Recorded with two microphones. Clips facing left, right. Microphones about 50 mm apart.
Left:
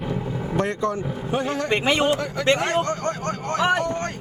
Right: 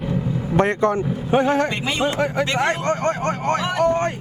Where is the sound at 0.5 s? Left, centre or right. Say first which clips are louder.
Right 6 dB; right.